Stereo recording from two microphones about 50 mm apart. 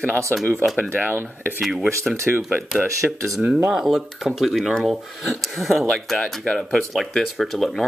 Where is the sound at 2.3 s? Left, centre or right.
Right.